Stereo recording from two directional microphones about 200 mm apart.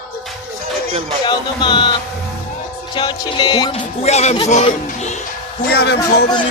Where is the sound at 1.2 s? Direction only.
25° left (ahead or behind).